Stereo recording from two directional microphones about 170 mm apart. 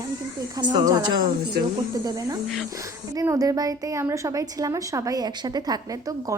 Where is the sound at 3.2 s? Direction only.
20° right (ahead or behind).